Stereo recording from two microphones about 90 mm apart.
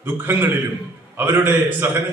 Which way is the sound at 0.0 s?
25° right (ahead or behind).